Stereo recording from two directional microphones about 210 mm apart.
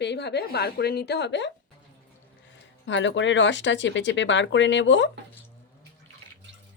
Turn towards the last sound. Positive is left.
turn(degrees=60)  # may be behind; listen again after turning